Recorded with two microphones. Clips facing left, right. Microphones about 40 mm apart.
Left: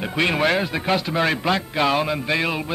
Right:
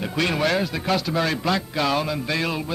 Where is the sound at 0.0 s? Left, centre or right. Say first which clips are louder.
Left 2 dB; left.